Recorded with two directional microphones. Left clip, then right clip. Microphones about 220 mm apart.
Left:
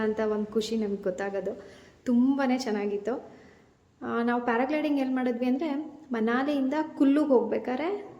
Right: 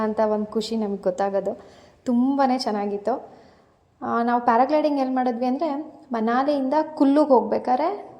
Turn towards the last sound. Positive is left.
turn(degrees=-15)  # may be behind; listen again after turning